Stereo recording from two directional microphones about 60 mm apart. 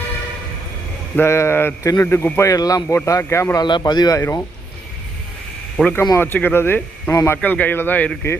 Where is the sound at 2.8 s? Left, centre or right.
Left.